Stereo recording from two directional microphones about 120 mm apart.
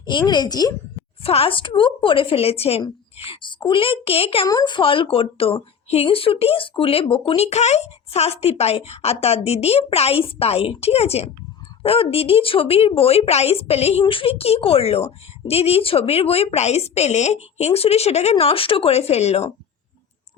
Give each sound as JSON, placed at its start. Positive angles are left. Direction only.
{"t": 0.0, "sound": "a woman's voice", "side_deg": 40}
{"t": 1.2, "sound": "a woman's voice", "side_deg": 55}
{"t": 3.2, "sound": "a woman's voice", "side_deg": 45}
{"t": 4.4, "sound": "speech", "side_deg": 35}
{"t": 14.0, "sound": "a woman's voice", "side_deg": 45}